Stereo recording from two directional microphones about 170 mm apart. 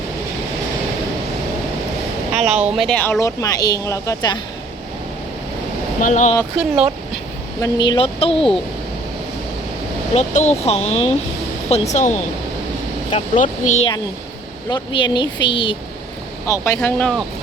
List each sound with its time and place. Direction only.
2.3 s speech: 40° right (ahead or behind)
2.6 s speech: 5° right (ahead or behind); by 4.4 s 20° left (ahead or behind)
6.0 s speech: 50° left (ahead or behind)
7.6 s speech: 25° left (ahead or behind)
10.2 s speech: 40° left (ahead or behind)
13.3 s speech: 45° left (ahead or behind)
14.7 s speech: 25° left (ahead or behind)
16.5 s speech: 15° left (ahead or behind)